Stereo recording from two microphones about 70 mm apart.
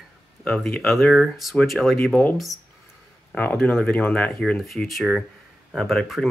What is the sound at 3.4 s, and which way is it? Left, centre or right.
Speech, left.